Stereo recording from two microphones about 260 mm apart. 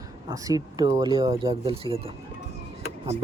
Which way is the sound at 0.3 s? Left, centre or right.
Centre.